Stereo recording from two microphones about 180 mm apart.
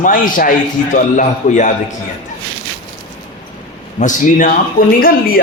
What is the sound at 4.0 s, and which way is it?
Speech, 45° left (ahead or behind).